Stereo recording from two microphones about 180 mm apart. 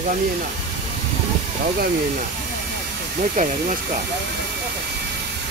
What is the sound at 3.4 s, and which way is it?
Speech, 45° right (ahead or behind).